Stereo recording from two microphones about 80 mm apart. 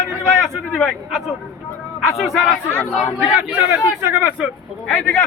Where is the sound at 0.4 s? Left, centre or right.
Centre.